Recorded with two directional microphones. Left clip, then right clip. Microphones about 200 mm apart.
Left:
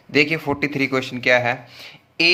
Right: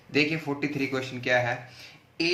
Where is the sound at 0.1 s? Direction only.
40° left (ahead or behind).